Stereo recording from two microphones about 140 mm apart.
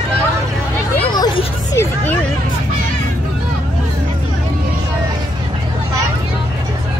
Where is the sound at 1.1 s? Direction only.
30° left (ahead or behind).